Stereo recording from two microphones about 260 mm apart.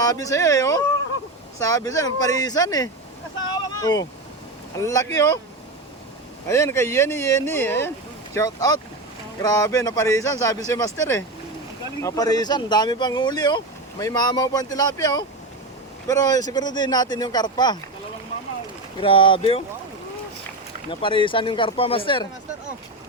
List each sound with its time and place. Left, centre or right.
0.0 s speech: centre
6.5 s speech: centre
18.9 s speech: centre
20.9 s speech: centre